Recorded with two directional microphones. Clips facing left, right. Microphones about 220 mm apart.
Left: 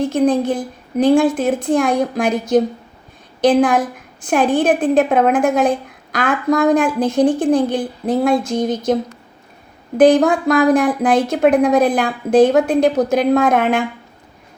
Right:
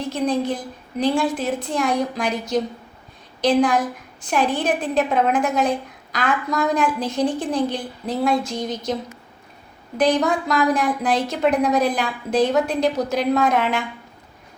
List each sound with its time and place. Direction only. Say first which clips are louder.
0.0 s a woman's voice: left 7 dB; 50° left (ahead or behind)
10.0 s a woman's voice: left 8 dB; 50° left (ahead or behind)